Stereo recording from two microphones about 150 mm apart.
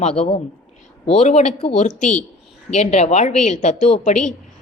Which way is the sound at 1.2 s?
50° left (ahead or behind).